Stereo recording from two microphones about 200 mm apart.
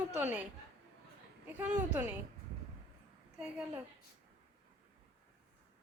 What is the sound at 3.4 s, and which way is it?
Speech, 5° right (ahead or behind).